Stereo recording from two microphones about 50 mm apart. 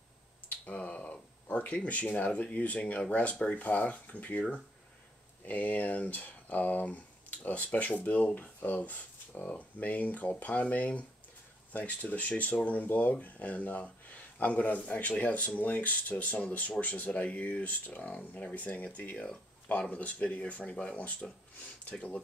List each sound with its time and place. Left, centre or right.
0.5 s finger snapping: left
1.9 s speech: left